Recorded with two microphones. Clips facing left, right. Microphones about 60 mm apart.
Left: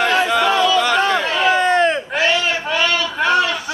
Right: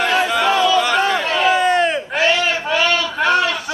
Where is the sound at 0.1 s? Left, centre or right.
Centre.